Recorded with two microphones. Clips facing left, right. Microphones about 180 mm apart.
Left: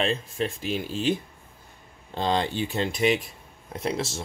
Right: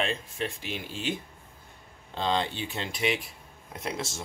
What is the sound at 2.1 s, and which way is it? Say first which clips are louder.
Speech: left 3 dB; 40° left (ahead or behind).